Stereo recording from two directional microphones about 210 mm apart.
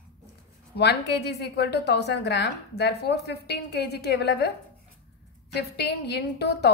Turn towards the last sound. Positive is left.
turn(degrees=50)  # may be behind; listen again after turning